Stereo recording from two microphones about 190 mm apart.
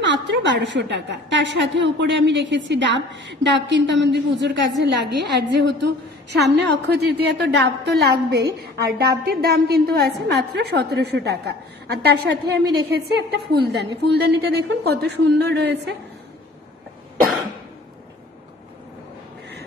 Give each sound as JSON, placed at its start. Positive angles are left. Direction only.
{"t": 0.0, "sound": "a woman's voice", "side_deg": -65}